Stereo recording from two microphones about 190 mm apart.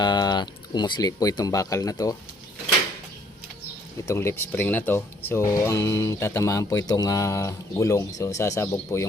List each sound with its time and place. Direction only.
0.0 s speech: 20° left (ahead or behind)
4.0 s speech: 15° left (ahead or behind)